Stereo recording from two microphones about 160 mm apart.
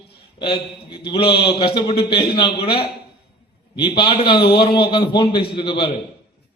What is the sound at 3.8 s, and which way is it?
A man's voice, 30° left (ahead or behind).